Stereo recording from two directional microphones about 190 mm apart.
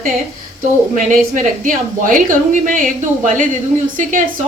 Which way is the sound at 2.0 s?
45° right (ahead or behind).